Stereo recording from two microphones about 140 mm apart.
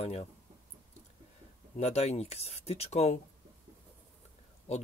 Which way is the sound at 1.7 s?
50° left (ahead or behind).